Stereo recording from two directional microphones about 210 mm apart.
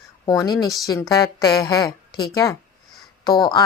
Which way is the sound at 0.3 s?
20° left (ahead or behind).